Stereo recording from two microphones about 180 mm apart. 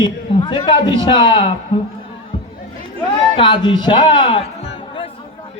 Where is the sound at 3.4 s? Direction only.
30° left (ahead or behind).